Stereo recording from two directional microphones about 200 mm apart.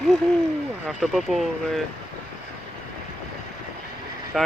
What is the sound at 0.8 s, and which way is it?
Speech, centre (ahead or behind).